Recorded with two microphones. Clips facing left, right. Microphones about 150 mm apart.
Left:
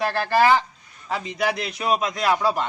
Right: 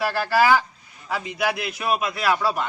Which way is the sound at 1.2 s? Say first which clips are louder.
Even; 5° right (ahead or behind).